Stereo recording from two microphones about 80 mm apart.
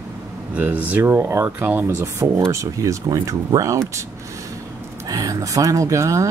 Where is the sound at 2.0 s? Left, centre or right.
Right.